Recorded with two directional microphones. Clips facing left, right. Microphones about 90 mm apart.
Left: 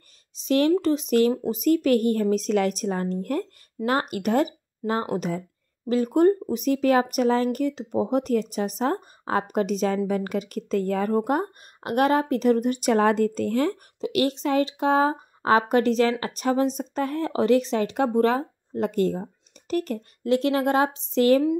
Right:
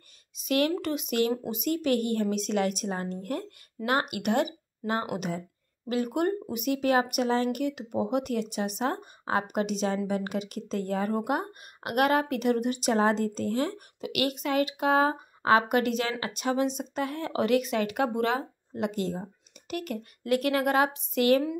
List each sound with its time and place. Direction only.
0.4 s speech: 30° left (ahead or behind)
13.0 s speech: 55° left (ahead or behind)
14.0 s speech: 30° left (ahead or behind); by 19.2 s 50° left (ahead or behind)
19.7 s speech: 35° left (ahead or behind)